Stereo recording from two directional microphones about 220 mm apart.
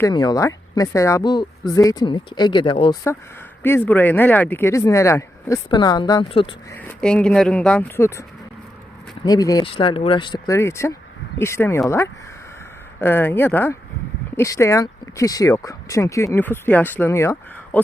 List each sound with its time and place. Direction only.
0.0 s speech: 20° left (ahead or behind)
3.6 s speech: 10° left (ahead or behind)
6.7 s speech: 5° left (ahead or behind)
9.2 s speech: 15° left (ahead or behind)